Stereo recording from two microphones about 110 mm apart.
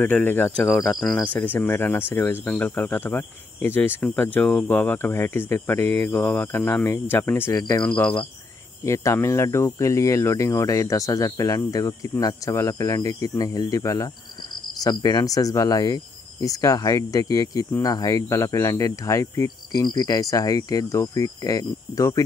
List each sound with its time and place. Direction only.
0.0 s speech: 20° left (ahead or behind)
8.8 s speech: 25° left (ahead or behind)